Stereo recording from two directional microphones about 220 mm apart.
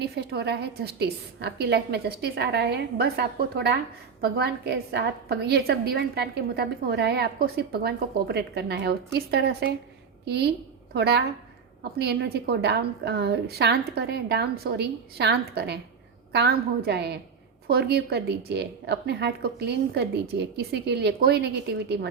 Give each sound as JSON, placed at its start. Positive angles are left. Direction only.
{"t": 0.0, "sound": "a woman's voice", "side_deg": -50}